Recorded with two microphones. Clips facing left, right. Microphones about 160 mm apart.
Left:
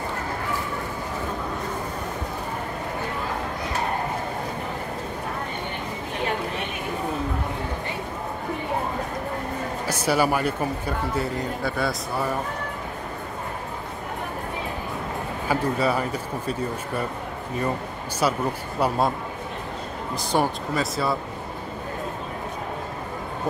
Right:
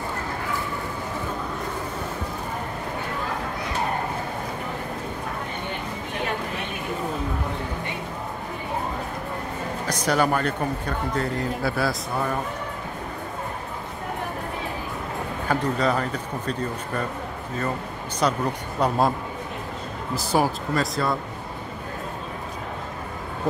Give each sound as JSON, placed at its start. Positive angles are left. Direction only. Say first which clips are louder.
{"t": 9.8, "sound": "speech", "louder": "even", "side_deg": 5}
{"t": 15.4, "sound": "speech", "louder": "even", "side_deg": 10}
{"t": 18.2, "sound": "speech", "louder": "even", "side_deg": 5}
{"t": 20.2, "sound": "speech", "louder": "right 1 dB", "side_deg": 0}